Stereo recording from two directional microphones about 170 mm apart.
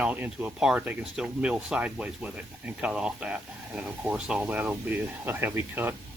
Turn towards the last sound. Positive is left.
turn(degrees=-15)  # may be behind; listen again after turning